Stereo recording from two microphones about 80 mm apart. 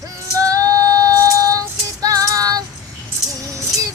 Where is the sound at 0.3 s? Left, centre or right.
Right.